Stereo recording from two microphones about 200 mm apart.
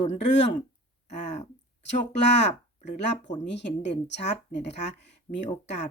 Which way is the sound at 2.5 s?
35° left (ahead or behind).